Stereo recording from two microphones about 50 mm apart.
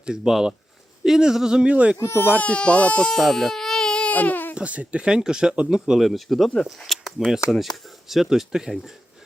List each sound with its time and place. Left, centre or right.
0.0 s speech: centre
1.7 s speech: right
2.1 s speech: left
2.4 s speech: left
3.1 s baby cry: centre
4.1 s baby cry: left
4.5 s speech: right; by 6.5 s centre
6.7 s a sound: centre
7.6 s speech: centre